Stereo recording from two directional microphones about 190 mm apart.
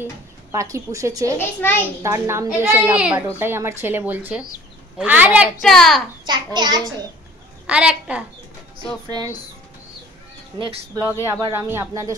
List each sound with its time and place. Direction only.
0.5 s a child's voice: 15° right (ahead or behind)
1.4 s a child's voice: 10° left (ahead or behind)
2.0 s a child's voice: 15° right (ahead or behind); by 6.0 s centre (ahead or behind)
6.2 s a child's voice: 25° right (ahead or behind)
7.6 s a woman's voice: 5° right (ahead or behind)
9.1 s a child's voice: 20° right (ahead or behind)
11.2 s a child's voice: 15° right (ahead or behind)